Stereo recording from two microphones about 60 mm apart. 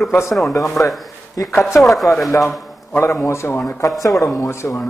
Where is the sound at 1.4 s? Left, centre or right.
Left.